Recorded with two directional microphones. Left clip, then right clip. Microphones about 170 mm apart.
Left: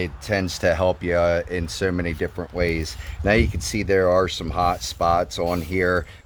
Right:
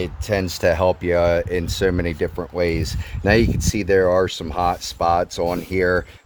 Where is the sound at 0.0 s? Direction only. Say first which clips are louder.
Right 2 dB; 30° right (ahead or behind).